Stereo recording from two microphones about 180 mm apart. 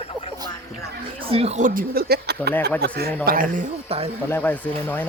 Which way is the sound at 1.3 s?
35° right (ahead or behind).